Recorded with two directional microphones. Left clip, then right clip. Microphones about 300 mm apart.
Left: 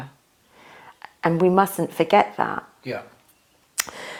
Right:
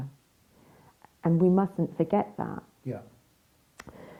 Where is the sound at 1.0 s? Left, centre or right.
Centre.